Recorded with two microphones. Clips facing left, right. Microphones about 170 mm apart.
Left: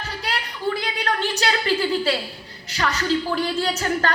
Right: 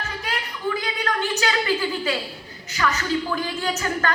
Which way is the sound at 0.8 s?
35° left (ahead or behind).